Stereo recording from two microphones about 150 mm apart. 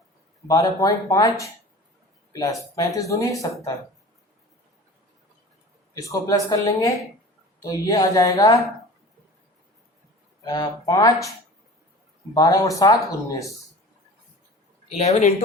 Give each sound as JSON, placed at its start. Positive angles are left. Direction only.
{"t": 0.4, "sound": "speech", "side_deg": 25}
{"t": 5.9, "sound": "speech", "side_deg": 20}
{"t": 10.4, "sound": "speech", "side_deg": 25}
{"t": 14.8, "sound": "a man's voice", "side_deg": 45}